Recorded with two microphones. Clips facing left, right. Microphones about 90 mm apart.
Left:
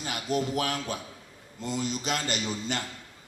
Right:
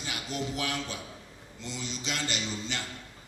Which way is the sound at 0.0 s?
45° left (ahead or behind).